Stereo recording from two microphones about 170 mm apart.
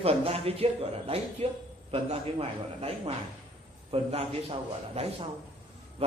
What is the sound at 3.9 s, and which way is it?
Speech, 35° right (ahead or behind).